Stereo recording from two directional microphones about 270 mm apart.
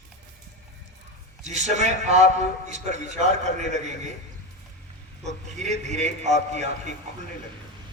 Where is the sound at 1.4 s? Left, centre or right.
Right.